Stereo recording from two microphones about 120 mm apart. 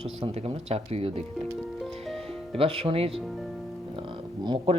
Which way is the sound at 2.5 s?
50° right (ahead or behind).